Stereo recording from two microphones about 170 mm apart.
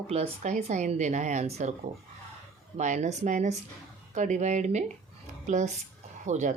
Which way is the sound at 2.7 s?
45° right (ahead or behind).